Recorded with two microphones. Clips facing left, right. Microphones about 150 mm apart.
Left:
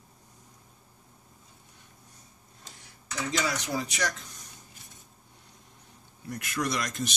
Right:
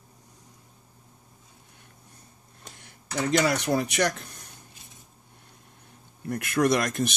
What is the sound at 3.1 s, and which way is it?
Speech, 60° right (ahead or behind).